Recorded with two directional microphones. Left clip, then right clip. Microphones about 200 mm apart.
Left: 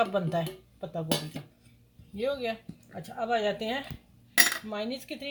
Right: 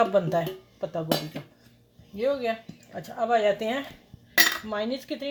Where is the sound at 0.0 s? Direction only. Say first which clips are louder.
Right 5 dB; 30° right (ahead or behind).